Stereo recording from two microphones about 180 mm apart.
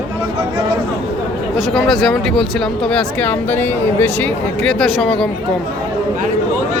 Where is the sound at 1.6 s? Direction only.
Centre (ahead or behind).